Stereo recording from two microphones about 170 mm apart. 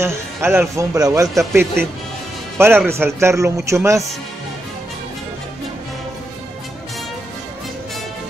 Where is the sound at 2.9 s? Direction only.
15° right (ahead or behind).